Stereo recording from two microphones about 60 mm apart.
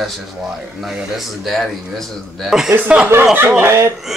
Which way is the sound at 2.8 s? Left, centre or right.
Right.